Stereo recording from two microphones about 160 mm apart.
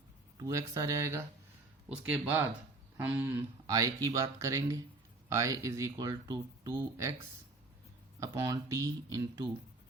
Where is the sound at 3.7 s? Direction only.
20° right (ahead or behind).